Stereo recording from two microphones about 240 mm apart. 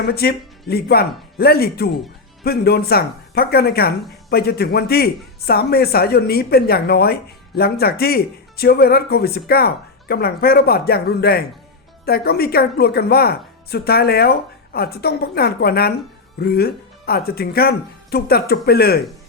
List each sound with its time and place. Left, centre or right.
0.0 s speech: left